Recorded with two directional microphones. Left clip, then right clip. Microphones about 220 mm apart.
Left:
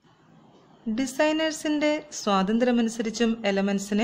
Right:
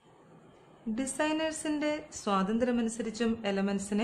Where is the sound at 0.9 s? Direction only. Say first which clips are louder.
Left 7 dB; 15° left (ahead or behind).